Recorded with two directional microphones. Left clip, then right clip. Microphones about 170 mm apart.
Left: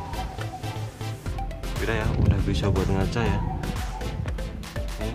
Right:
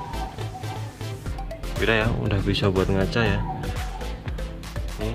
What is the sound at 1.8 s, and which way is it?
Speech, 25° right (ahead or behind).